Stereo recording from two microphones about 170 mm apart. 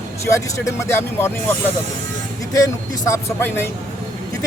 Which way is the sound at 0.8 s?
15° left (ahead or behind).